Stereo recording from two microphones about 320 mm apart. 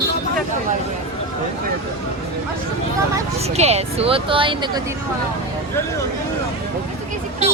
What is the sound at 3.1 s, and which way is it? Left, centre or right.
Speech, centre.